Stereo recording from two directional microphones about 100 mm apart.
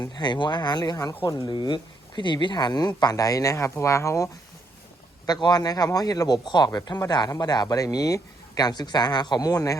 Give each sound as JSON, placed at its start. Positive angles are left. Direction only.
{"t": 0.2, "sound": "speech", "side_deg": 45}
{"t": 5.2, "sound": "speech", "side_deg": 45}